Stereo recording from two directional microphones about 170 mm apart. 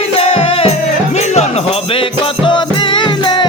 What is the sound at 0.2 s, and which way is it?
Music, 35° left (ahead or behind).